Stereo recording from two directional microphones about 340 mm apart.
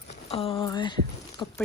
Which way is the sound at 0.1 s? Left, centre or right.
Centre.